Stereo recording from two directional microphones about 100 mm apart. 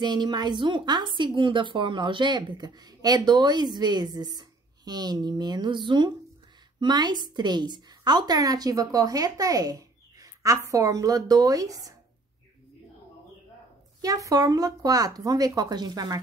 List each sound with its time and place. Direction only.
0.0 s a woman's voice: 45° right (ahead or behind)
14.0 s a woman's voice: 35° right (ahead or behind)